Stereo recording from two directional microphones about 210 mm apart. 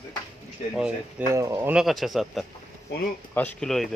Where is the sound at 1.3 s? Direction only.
15° right (ahead or behind); by 3.8 s centre (ahead or behind).